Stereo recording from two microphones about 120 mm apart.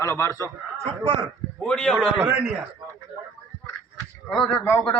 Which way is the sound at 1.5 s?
10° left (ahead or behind).